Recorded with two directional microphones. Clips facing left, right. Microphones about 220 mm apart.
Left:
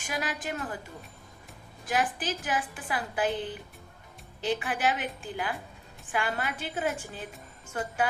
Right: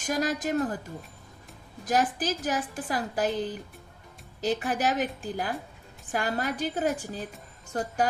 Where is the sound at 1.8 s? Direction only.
40° right (ahead or behind).